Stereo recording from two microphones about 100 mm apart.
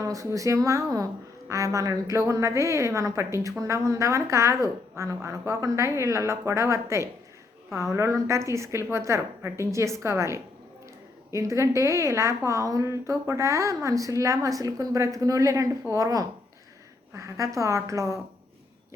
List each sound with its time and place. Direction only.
0.0 s a woman's voice: 35° right (ahead or behind)